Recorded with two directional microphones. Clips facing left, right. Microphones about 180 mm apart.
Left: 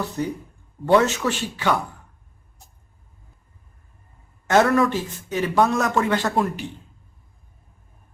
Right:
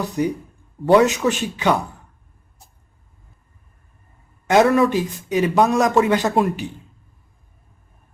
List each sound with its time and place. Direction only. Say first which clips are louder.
0.2 s speech: right 5 dB; 10° right (ahead or behind)
4.4 s speech: right 3 dB; 15° right (ahead or behind)